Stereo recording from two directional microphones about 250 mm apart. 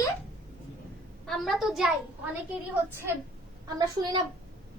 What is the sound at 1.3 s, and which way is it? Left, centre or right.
Speech, centre.